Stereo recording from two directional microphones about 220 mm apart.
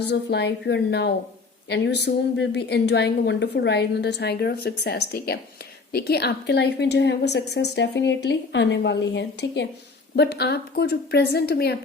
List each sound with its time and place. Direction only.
0.0 s a woman's voice: 50° left (ahead or behind)